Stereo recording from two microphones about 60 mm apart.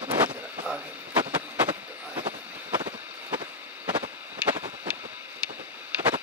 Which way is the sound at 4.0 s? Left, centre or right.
Right.